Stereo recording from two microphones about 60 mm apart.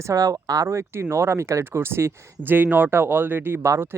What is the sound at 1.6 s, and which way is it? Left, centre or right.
Speech, right.